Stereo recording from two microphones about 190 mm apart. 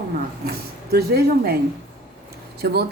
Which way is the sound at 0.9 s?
55° right (ahead or behind).